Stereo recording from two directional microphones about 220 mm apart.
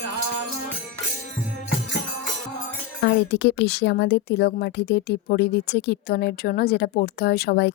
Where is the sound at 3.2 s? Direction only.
50° left (ahead or behind).